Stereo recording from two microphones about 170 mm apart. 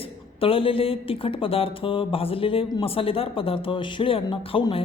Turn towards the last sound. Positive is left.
turn(degrees=30)  # may be behind; listen again after turning